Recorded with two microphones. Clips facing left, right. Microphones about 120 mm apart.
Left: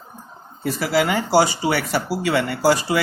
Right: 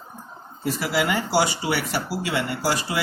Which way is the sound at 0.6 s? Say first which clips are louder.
Left 4 dB; 45° left (ahead or behind).